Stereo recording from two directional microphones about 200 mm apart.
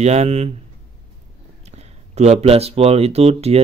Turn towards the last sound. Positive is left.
turn(degrees=-30)  # may be behind; listen again after turning